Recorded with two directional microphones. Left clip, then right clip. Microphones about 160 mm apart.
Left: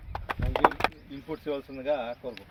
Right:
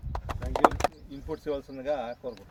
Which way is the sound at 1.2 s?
5° left (ahead or behind).